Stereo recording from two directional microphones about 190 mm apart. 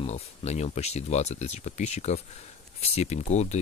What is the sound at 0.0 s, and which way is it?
Speech, 35° left (ahead or behind).